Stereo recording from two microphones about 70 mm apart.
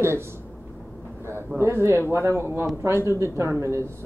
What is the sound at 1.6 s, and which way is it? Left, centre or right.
Speech, right.